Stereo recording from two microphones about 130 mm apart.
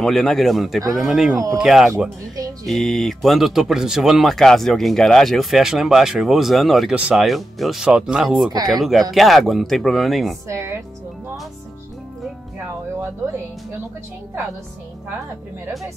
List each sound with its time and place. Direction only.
0.0 s speech: 5° left (ahead or behind)
1.3 s speech: 25° right (ahead or behind)
1.6 s speech: centre (ahead or behind)
10.5 s speech: 20° right (ahead or behind)